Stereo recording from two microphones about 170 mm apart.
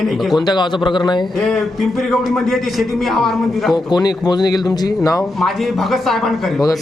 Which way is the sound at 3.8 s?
25° left (ahead or behind).